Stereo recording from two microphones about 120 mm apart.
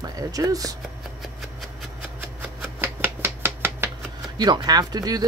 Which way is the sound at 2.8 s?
20° right (ahead or behind).